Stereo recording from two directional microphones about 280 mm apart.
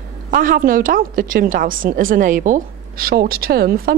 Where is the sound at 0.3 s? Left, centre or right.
Right.